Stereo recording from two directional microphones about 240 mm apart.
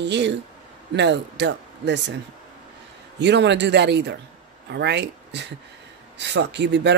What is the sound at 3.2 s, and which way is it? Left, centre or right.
Speech, right.